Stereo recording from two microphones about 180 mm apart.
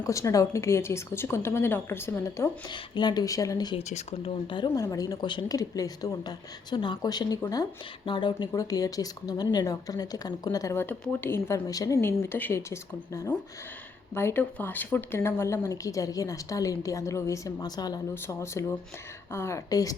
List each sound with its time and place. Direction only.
0.0 s speech: 20° left (ahead or behind)
3.8 s speech: 35° left (ahead or behind); by 19.9 s 20° left (ahead or behind)